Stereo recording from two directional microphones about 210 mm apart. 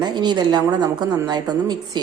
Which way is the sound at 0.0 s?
20° right (ahead or behind).